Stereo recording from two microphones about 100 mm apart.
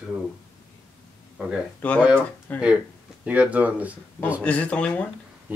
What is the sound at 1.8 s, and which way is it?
Speech, 15° left (ahead or behind).